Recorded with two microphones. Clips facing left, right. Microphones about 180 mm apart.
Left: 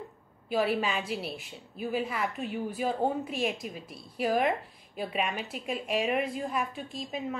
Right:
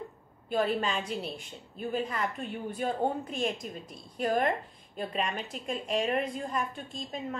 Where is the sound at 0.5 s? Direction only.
5° left (ahead or behind).